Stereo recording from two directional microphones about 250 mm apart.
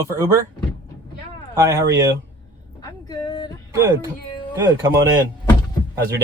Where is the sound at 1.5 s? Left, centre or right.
Centre.